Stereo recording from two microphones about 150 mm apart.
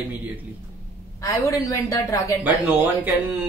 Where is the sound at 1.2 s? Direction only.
20° left (ahead or behind).